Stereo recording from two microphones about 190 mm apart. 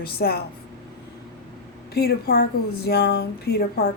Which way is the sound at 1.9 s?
60° left (ahead or behind).